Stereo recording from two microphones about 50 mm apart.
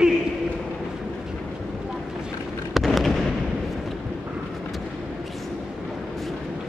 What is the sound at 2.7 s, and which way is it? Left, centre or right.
Fireworks, centre.